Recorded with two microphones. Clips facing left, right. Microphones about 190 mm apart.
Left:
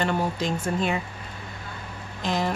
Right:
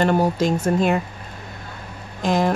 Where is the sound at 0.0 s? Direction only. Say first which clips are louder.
Right 7 dB; 45° right (ahead or behind).